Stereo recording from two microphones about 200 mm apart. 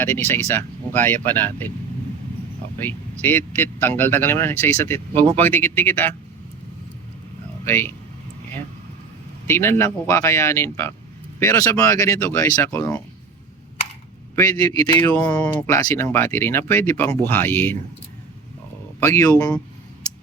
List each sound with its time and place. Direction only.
0.3 s speech: 10° left (ahead or behind)
2.7 s speech: 10° left (ahead or behind)
7.6 s a man's voice: 10° left (ahead or behind)
9.5 s speech: 10° left (ahead or behind)
14.3 s speech: 20° left (ahead or behind)
15.1 s speech: 5° left (ahead or behind)
18.9 s speech: 15° left (ahead or behind)